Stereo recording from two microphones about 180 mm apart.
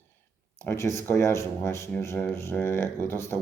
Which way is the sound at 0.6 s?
15° left (ahead or behind).